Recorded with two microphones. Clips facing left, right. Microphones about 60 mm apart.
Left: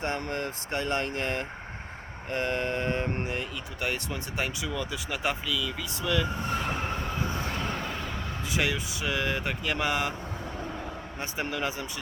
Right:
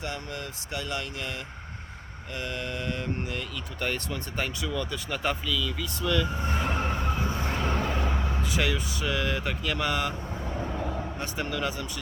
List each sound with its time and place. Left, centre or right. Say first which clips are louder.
0.0 s speech: left 4 dB; left
3.8 s speech: right 1 dB; centre
6.5 s train: right 1 dB; centre
7.5 s vehicle: right 4 dB; centre
8.4 s speech: left 1 dB; centre
10.6 s vehicle: right 7 dB; centre
11.2 s speech: left 2 dB; left